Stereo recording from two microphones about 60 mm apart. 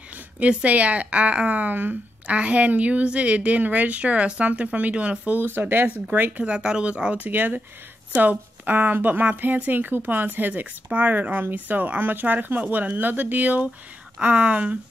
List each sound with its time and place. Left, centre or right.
0.4 s a woman's voice: right
6.4 s a woman's voice: centre
7.2 s a woman's voice: right